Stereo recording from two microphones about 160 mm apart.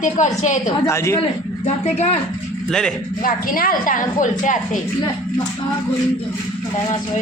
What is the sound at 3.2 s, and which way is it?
A woman's voice, 60° left (ahead or behind).